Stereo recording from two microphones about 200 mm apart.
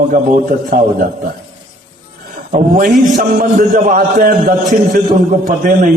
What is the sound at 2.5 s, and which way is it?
A man's voice, 45° right (ahead or behind).